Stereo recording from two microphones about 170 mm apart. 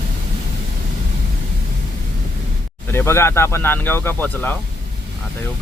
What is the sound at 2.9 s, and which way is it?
Speech, 15° left (ahead or behind).